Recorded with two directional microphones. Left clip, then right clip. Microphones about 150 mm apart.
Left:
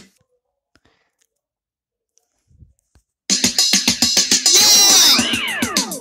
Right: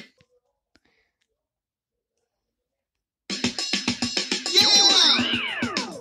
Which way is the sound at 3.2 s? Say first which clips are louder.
Left 11 dB; 65° left (ahead or behind).